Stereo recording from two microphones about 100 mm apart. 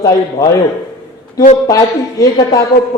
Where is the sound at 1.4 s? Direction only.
35° left (ahead or behind).